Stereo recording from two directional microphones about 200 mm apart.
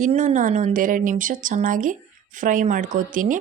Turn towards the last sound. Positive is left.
turn(degrees=-40)  # may be behind; listen again after turning